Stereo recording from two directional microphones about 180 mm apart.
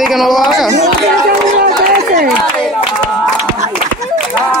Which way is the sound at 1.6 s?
50° right (ahead or behind).